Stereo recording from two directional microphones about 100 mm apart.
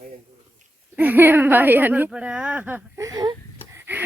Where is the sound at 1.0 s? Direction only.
20° right (ahead or behind).